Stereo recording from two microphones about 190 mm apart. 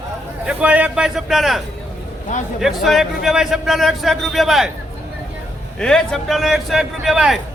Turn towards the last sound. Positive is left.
turn(degrees=0)  # may be behind; listen again after turning